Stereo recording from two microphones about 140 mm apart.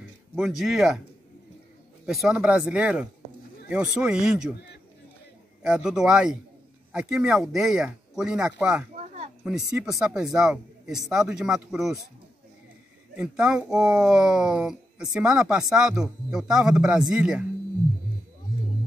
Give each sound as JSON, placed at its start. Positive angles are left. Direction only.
{"t": 0.4, "sound": "speech", "side_deg": 0}
{"t": 2.0, "sound": "speech", "side_deg": -5}
{"t": 5.6, "sound": "speech", "side_deg": -5}
{"t": 13.1, "sound": "speech", "side_deg": -5}